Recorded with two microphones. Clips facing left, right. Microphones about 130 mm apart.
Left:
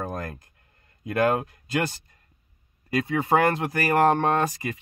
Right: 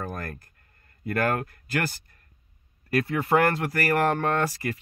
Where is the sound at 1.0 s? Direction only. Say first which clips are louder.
Left 3 dB; 15° left (ahead or behind).